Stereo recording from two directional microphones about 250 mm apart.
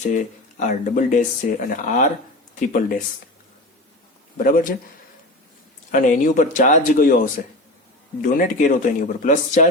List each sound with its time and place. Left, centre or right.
0.7 s speech: left
4.4 s speech: left
5.9 s speech: left
8.2 s speech: left